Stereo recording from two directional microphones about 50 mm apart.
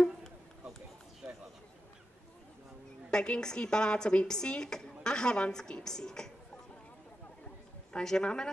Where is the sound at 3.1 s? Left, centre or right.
Centre.